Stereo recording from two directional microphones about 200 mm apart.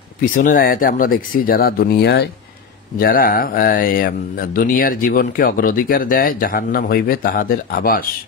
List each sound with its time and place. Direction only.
0.2 s speech: 40° left (ahead or behind)